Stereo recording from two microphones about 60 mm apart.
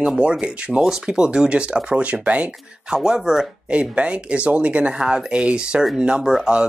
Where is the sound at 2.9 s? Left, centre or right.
Centre.